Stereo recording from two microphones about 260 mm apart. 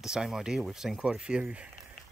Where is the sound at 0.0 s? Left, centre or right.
Centre.